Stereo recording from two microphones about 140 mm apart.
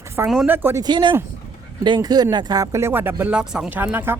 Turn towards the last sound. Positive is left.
turn(degrees=-15)  # may be behind; listen again after turning